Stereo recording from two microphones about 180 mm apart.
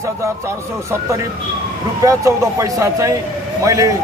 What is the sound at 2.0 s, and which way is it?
A man's voice, 20° right (ahead or behind).